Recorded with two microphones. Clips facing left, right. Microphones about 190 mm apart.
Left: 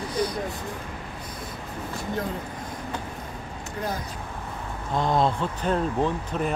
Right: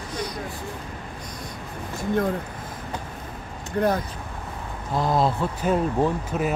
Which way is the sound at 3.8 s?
60° right (ahead or behind).